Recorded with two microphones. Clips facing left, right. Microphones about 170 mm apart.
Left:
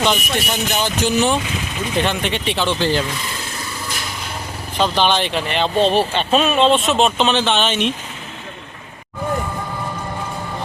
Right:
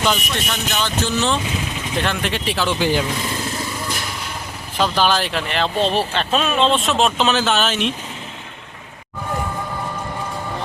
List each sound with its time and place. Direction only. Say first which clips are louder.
0.1 s speech: left 2 dB; 15° left (ahead or behind)
2.0 s speech: left 2 dB; centre (ahead or behind)
4.8 s speech: left 1 dB; 5° right (ahead or behind)